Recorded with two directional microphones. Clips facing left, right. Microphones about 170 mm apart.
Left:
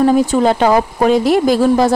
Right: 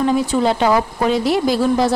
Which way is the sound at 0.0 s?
45° left (ahead or behind).